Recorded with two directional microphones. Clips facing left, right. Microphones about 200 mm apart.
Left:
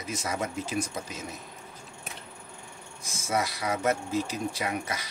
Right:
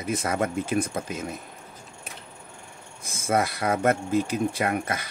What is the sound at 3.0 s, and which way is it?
Speech, 55° right (ahead or behind).